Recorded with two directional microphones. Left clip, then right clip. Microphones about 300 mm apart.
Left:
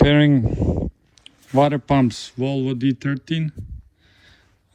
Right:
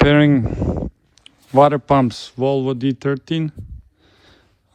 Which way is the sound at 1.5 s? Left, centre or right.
Centre.